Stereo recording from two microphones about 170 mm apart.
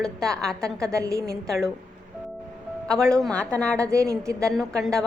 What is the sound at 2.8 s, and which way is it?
A woman's voice, 5° left (ahead or behind).